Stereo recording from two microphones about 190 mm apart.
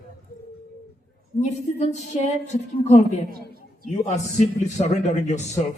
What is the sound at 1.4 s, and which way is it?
A man's voice, 40° left (ahead or behind).